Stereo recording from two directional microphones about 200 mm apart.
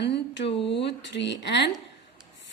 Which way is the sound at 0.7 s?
60° left (ahead or behind).